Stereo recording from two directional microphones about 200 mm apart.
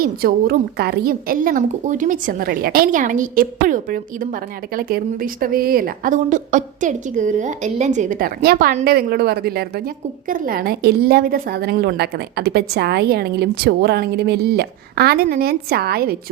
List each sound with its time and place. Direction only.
0.0 s a woman's voice: 45° right (ahead or behind)